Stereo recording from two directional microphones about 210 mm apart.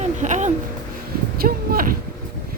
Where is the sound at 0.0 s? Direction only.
35° right (ahead or behind).